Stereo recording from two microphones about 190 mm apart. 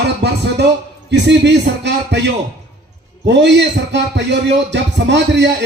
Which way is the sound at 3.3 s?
65° right (ahead or behind).